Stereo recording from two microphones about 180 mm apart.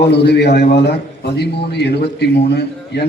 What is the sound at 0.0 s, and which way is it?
A man's voice, 70° left (ahead or behind).